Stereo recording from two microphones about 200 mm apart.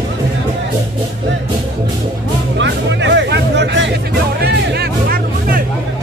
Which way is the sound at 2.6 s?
65° right (ahead or behind).